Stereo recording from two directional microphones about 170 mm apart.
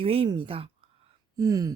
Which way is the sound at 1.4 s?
20° right (ahead or behind).